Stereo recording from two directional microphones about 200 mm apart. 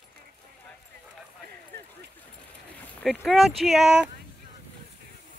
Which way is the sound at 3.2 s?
Centre (ahead or behind).